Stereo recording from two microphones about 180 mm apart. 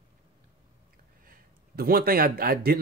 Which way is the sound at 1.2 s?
55° right (ahead or behind).